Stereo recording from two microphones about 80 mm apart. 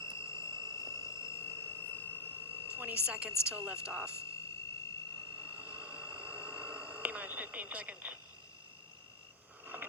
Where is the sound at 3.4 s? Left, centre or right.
Centre.